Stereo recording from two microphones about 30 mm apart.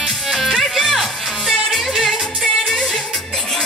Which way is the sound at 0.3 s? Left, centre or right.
Centre.